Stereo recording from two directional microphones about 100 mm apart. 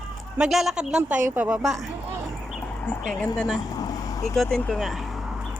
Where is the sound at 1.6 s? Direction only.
5° right (ahead or behind).